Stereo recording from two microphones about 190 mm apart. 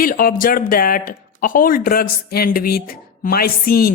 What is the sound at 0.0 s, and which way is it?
A woman's voice, 50° left (ahead or behind).